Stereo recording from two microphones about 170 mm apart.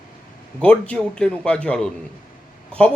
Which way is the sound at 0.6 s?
5° left (ahead or behind).